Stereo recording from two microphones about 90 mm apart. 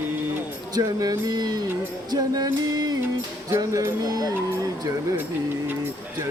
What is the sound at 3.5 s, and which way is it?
Speech, 35° right (ahead or behind).